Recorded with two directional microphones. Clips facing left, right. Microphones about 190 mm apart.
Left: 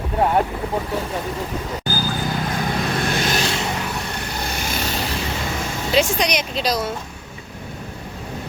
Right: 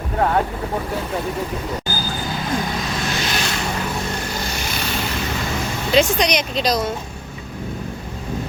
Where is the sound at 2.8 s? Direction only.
55° left (ahead or behind).